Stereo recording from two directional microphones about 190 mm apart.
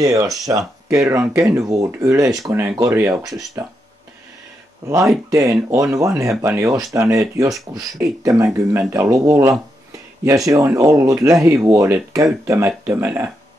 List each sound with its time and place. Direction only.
0.0 s speech: 20° right (ahead or behind)
4.8 s speech: 15° right (ahead or behind)